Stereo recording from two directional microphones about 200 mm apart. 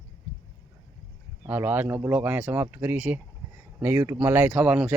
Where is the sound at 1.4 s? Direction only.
10° right (ahead or behind).